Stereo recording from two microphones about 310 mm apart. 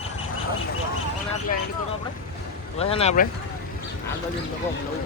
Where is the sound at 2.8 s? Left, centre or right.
Centre.